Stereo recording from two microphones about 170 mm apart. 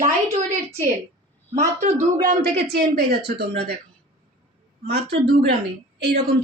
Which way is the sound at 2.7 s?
70° right (ahead or behind).